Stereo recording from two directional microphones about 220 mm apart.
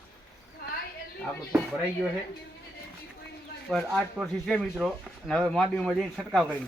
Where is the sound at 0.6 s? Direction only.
45° left (ahead or behind).